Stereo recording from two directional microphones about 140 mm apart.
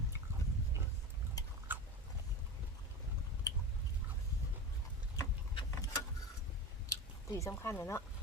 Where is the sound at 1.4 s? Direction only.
25° left (ahead or behind).